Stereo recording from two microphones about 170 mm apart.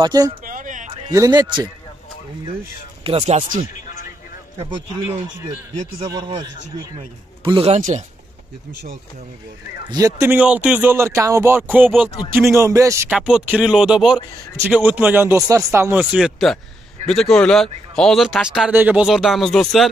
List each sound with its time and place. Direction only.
0.0 s a man's voice: 25° right (ahead or behind)
0.5 s a sound: 50° right (ahead or behind)
1.1 s a man's voice: 20° right (ahead or behind)
3.0 s speech: 35° right (ahead or behind)
6.1 s a man's voice: 25° right (ahead or behind); by 8.0 s 40° right (ahead or behind)
9.8 s speech: 20° right (ahead or behind)
13.1 s speech: 5° right (ahead or behind)